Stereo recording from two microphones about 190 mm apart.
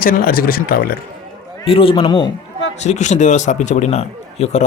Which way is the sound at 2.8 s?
40° left (ahead or behind).